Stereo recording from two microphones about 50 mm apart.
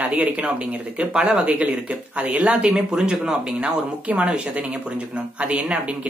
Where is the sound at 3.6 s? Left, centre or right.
Right.